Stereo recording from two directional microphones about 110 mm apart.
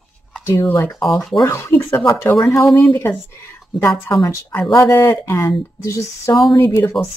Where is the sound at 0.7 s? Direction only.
25° left (ahead or behind).